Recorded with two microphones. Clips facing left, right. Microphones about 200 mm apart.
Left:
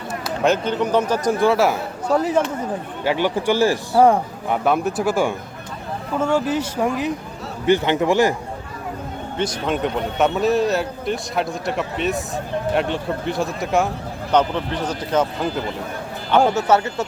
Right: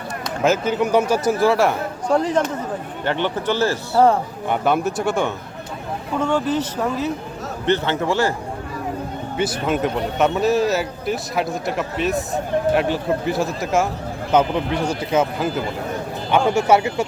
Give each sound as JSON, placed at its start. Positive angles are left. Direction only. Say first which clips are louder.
{"t": 0.3, "sound": "speech", "louder": "even", "side_deg": 0}
{"t": 4.4, "sound": "speech", "louder": "even", "side_deg": 0}
{"t": 9.4, "sound": "speech", "louder": "right 1 dB", "side_deg": -5}
{"t": 14.3, "sound": "speech", "louder": "right 1 dB", "side_deg": -10}